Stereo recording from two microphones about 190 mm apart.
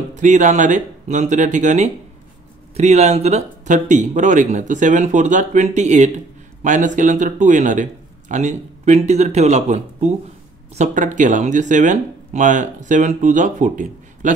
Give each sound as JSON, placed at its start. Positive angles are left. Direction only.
{"t": 0.1, "sound": "speech", "side_deg": -40}